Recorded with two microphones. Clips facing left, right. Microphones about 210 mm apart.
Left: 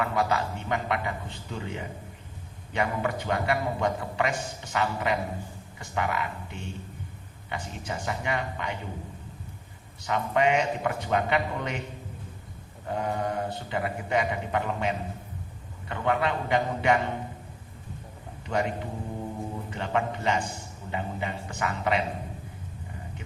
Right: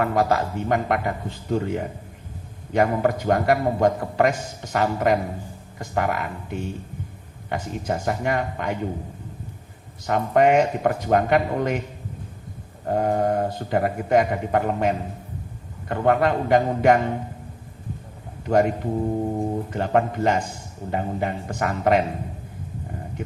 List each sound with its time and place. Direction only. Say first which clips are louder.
0.0 s a man's voice: right 6 dB; 50° right (ahead or behind)
10.1 s a man's voice: right 7 dB; 50° right (ahead or behind)
12.8 s a man's voice: right 8 dB; 50° right (ahead or behind)
18.4 s a man's voice: right 9 dB; 50° right (ahead or behind)